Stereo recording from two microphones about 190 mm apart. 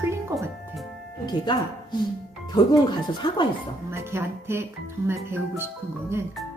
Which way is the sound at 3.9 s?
15° right (ahead or behind).